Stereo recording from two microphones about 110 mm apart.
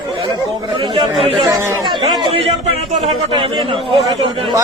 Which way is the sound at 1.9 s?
45° right (ahead or behind).